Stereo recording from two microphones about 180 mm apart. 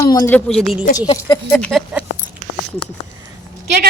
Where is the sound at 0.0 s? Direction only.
15° left (ahead or behind).